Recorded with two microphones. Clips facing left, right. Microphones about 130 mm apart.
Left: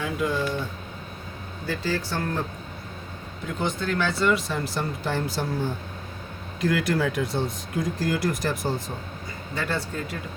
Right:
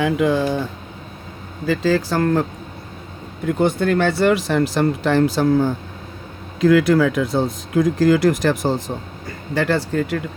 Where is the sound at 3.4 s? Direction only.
60° right (ahead or behind); by 5.5 s 90° right.